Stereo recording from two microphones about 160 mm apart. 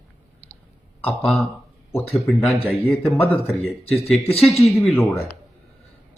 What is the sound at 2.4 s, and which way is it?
Speech, 10° left (ahead or behind).